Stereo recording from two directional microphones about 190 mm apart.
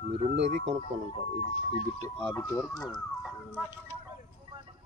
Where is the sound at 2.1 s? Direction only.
5° left (ahead or behind).